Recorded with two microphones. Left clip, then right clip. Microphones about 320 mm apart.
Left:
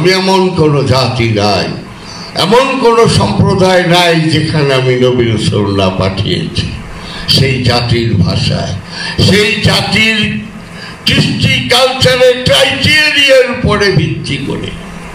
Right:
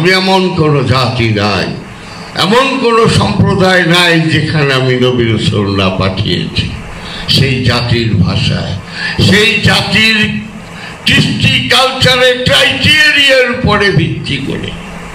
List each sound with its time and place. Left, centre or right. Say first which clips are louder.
0.0 s a man's voice: even; centre
11.1 s a man's voice: right 1 dB; centre